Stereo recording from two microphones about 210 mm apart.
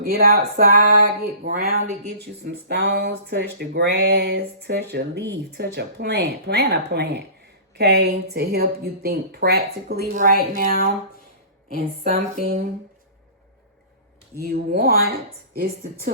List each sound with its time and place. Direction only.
0.0 s a woman's voice: 45° right (ahead or behind)
14.3 s speech: 45° right (ahead or behind)